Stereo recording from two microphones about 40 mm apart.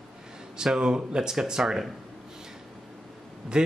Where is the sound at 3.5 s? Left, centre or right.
Centre.